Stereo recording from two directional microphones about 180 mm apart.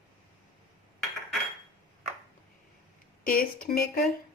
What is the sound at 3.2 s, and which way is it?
Speech, 55° left (ahead or behind).